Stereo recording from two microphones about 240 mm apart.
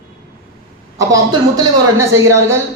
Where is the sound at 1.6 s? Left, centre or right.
Centre.